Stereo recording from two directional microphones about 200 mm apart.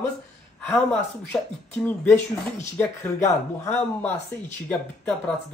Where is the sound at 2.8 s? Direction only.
15° left (ahead or behind).